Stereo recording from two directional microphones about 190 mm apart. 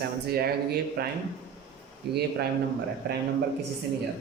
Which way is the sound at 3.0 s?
60° right (ahead or behind).